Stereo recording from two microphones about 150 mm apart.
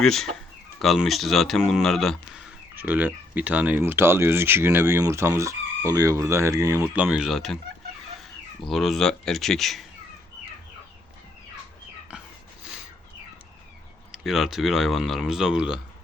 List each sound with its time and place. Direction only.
0.0 s speech: centre (ahead or behind)
2.7 s speech: 10° right (ahead or behind)
6.8 s speech: 10° right (ahead or behind)
8.6 s speech: centre (ahead or behind)
12.1 s a sound: 10° right (ahead or behind)
14.1 s speech: centre (ahead or behind)